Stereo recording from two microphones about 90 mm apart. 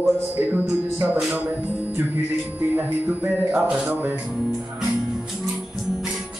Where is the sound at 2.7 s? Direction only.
20° right (ahead or behind).